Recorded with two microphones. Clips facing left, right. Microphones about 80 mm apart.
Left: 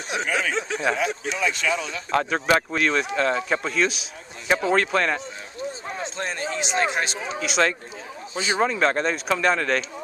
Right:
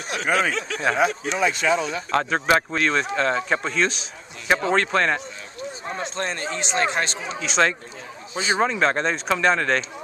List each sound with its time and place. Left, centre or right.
0.1 s speech: centre
0.9 s speech: right
2.0 s a man's voice: centre